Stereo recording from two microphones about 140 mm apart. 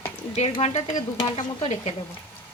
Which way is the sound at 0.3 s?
45° left (ahead or behind).